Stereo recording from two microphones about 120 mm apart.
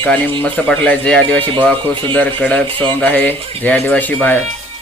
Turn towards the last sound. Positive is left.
turn(degrees=15)  # may be behind; listen again after turning